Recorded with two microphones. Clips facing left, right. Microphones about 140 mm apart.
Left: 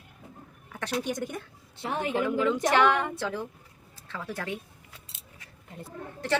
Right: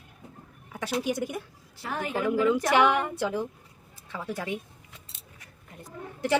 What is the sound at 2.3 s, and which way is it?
A woman's voice, 5° right (ahead or behind).